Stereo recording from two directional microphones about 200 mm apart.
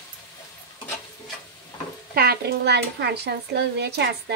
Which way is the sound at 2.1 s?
50° right (ahead or behind).